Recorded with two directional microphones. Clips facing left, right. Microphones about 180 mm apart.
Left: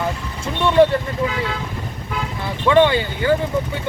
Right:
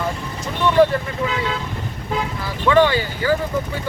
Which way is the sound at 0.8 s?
25° left (ahead or behind).